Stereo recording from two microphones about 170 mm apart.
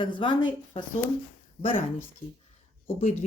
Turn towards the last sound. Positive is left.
turn(degrees=40)  # may be behind; listen again after turning